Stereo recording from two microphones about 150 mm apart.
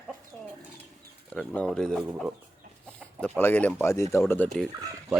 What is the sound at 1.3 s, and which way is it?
Speech, 5° left (ahead or behind).